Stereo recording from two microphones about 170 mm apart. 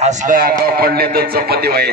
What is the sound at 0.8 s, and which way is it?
Speech, 65° right (ahead or behind).